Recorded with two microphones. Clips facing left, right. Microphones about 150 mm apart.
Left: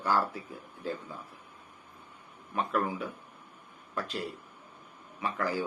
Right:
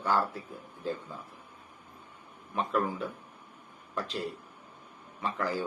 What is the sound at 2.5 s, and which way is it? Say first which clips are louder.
A man's voice: even; centre (ahead or behind).